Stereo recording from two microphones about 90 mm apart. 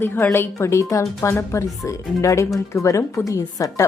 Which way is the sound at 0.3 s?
30° left (ahead or behind).